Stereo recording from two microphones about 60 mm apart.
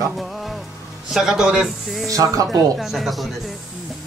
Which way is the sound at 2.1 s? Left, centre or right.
Right.